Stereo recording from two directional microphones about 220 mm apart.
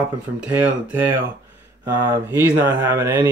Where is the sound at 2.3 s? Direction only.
10° right (ahead or behind).